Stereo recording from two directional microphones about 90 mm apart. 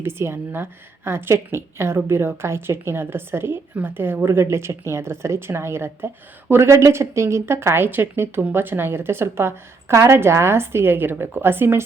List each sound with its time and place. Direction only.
0.0 s a woman's voice: 25° right (ahead or behind)